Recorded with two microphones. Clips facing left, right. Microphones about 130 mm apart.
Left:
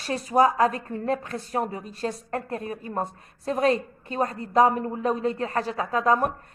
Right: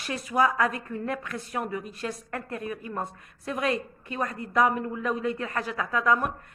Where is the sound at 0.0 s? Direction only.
35° left (ahead or behind).